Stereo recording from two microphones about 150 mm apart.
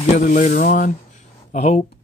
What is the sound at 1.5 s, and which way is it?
Speech, 45° left (ahead or behind).